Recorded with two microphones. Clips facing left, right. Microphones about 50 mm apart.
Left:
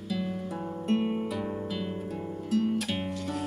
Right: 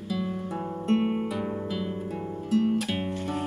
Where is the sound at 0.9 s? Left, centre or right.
Centre.